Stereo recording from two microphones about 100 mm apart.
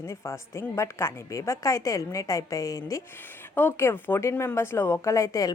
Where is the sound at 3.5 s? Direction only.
20° left (ahead or behind).